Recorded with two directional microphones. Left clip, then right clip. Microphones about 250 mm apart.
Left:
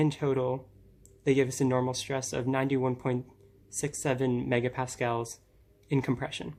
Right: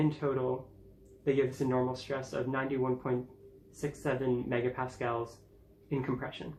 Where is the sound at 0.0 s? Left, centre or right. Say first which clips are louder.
Left 3 dB; left.